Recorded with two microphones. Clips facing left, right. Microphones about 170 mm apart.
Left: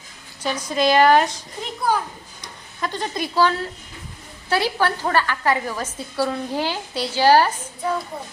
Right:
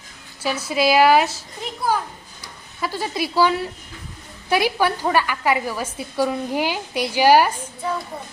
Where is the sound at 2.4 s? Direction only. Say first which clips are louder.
Even; 5° right (ahead or behind).